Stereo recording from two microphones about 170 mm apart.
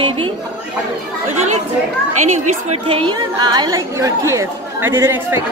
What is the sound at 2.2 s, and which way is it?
Speech, 45° right (ahead or behind).